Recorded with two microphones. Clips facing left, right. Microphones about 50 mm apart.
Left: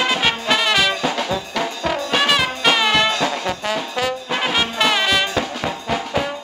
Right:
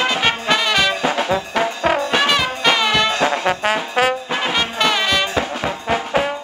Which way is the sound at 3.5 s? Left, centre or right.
Right.